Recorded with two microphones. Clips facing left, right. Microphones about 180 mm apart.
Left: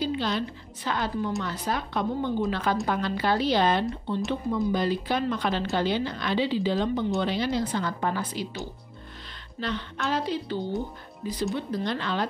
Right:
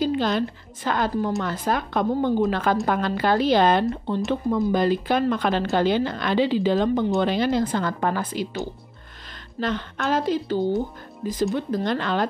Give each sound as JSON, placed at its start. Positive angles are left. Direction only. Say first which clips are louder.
{"t": 0.0, "sound": "a woman's voice", "louder": "right 5 dB", "side_deg": -50}
{"t": 9.6, "sound": "a woman's voice", "louder": "right 5 dB", "side_deg": -45}